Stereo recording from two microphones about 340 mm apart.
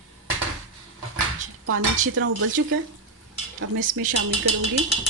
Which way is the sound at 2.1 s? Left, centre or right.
Right.